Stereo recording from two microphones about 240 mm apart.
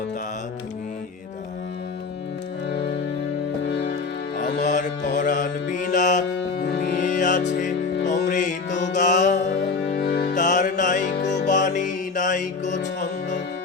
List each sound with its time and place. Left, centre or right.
4.4 s music: left
4.6 s mantra: left
6.8 s music: left
9.9 s music: left